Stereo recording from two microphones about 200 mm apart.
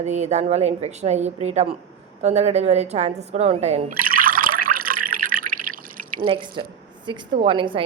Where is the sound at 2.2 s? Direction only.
35° right (ahead or behind).